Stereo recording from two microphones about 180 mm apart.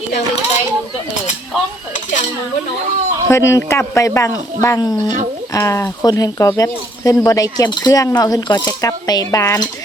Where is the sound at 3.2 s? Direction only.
15° left (ahead or behind).